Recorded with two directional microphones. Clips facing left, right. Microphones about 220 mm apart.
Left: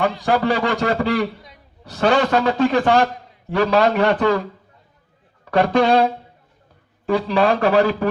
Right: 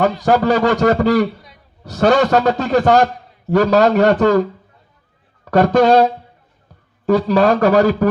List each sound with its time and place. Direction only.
0.0 s speech: 45° right (ahead or behind)
5.5 s speech: 45° right (ahead or behind)